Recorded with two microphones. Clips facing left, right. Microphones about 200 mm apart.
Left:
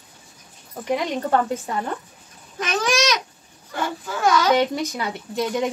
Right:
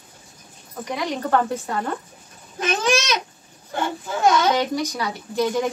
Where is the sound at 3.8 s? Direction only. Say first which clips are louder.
Right 2 dB; 25° right (ahead or behind).